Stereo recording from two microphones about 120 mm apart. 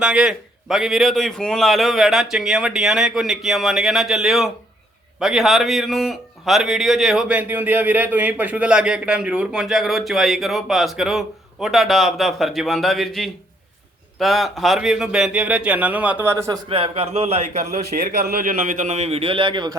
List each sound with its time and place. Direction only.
0.0 s a man's voice: 5° right (ahead or behind)
16.6 s a man's voice: 50° right (ahead or behind)